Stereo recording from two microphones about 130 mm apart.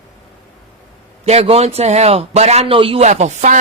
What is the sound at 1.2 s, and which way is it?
A man's voice, 50° right (ahead or behind).